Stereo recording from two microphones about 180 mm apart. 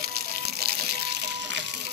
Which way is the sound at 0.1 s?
60° right (ahead or behind).